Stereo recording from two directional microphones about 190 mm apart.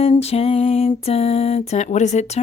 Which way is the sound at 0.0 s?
30° left (ahead or behind).